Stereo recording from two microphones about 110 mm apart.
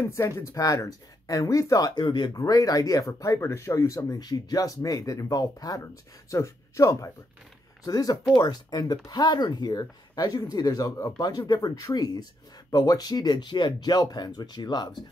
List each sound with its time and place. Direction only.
0.0 s speech: 25° left (ahead or behind); by 2.3 s 45° left (ahead or behind)
2.3 s speech: 35° left (ahead or behind)